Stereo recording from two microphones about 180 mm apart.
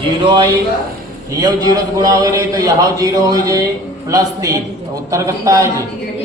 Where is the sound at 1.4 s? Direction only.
20° right (ahead or behind).